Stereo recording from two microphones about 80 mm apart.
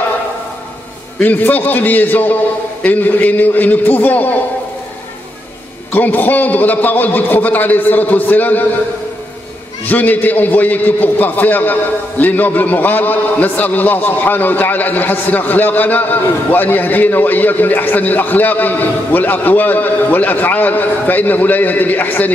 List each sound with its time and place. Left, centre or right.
1.2 s a man's voice: left
5.9 s a man's voice: left
9.8 s a man's voice: left